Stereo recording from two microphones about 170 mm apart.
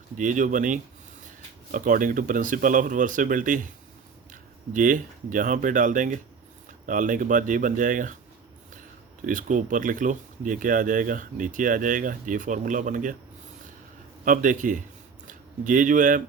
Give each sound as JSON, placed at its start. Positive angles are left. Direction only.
{"t": 0.2, "sound": "speech", "side_deg": -50}
{"t": 9.2, "sound": "speech", "side_deg": -50}
{"t": 14.3, "sound": "speech", "side_deg": -50}